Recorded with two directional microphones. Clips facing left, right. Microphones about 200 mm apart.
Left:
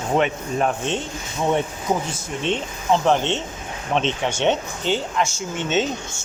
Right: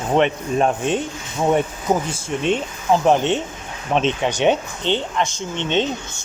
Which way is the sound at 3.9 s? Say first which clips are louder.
Right 3 dB; 35° right (ahead or behind).